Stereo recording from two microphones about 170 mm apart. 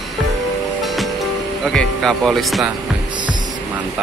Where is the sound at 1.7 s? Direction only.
Centre (ahead or behind).